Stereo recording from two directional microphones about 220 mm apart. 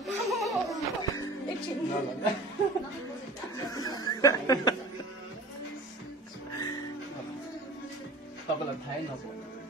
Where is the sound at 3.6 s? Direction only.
20° left (ahead or behind).